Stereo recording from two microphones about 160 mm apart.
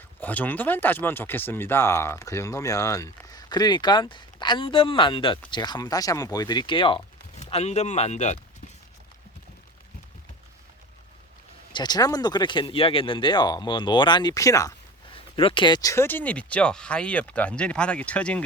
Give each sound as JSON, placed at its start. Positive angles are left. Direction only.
{"t": 0.2, "sound": "speech", "side_deg": 10}
{"t": 11.7, "sound": "speech", "side_deg": 25}
{"t": 15.1, "sound": "speech", "side_deg": 35}